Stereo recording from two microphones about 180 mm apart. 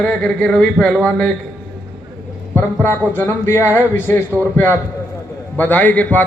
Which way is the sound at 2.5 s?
10° left (ahead or behind).